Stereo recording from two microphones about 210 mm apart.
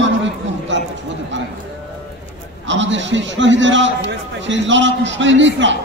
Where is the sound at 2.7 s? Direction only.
60° right (ahead or behind).